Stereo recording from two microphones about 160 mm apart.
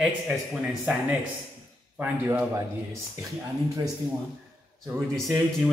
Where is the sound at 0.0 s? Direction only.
5° right (ahead or behind).